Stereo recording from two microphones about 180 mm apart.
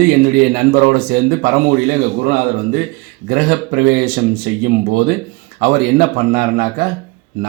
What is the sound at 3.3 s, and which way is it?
Speech, 50° right (ahead or behind).